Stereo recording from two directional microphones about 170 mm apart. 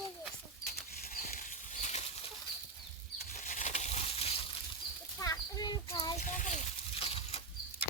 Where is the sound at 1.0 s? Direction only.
55° left (ahead or behind).